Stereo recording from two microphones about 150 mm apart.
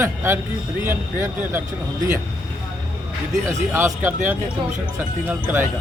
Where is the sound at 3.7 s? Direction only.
15° right (ahead or behind).